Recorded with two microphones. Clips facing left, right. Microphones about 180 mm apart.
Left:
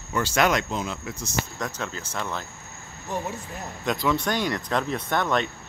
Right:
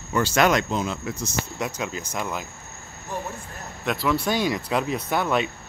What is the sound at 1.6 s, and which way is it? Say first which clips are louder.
Speech: right 3 dB; 10° right (ahead or behind).